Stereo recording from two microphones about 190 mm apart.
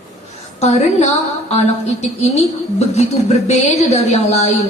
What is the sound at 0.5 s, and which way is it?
Speech, 35° left (ahead or behind).